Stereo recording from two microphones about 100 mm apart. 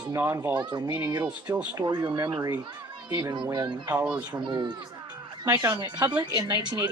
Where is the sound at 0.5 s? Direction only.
50° right (ahead or behind).